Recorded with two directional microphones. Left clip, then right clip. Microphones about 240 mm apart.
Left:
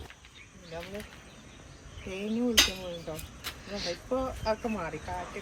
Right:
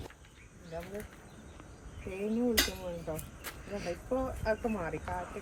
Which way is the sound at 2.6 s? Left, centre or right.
Centre.